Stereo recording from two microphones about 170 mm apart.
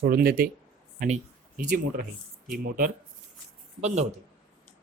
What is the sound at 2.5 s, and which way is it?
Speech, 60° right (ahead or behind).